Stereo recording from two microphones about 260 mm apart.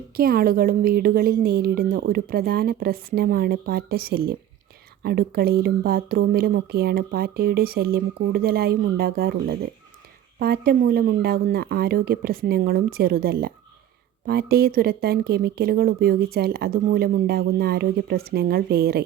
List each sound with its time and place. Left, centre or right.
0.2 s a woman's voice: right